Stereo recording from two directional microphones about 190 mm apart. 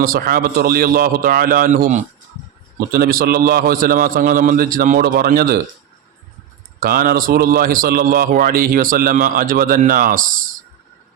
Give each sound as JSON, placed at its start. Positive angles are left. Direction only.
{"t": 0.0, "sound": "speech", "side_deg": -50}
{"t": 6.7, "sound": "speech", "side_deg": -50}